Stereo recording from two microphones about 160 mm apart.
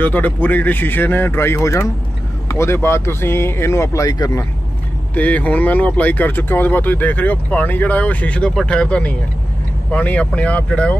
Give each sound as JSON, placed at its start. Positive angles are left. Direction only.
{"t": 0.0, "sound": "speech", "side_deg": 10}
{"t": 5.1, "sound": "speech", "side_deg": 10}